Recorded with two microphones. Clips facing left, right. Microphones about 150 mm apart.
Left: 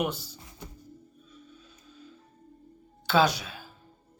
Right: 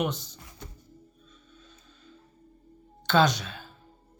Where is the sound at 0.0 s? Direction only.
5° left (ahead or behind).